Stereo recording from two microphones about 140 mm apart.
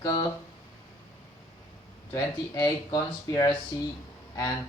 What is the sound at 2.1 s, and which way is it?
Speech, 25° left (ahead or behind).